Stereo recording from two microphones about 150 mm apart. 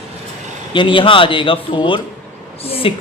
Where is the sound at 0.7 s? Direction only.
35° left (ahead or behind).